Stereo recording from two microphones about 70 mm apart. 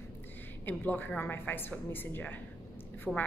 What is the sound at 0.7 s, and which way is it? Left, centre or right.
A woman's voice, left.